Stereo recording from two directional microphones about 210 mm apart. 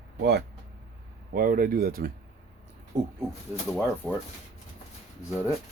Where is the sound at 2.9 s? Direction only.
20° right (ahead or behind).